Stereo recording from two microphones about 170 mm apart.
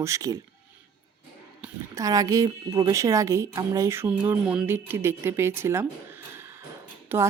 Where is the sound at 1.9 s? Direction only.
20° right (ahead or behind).